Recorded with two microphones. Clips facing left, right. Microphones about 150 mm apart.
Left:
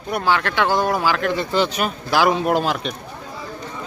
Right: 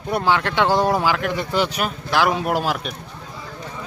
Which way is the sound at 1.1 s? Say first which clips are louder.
Left 2 dB; 15° right (ahead or behind).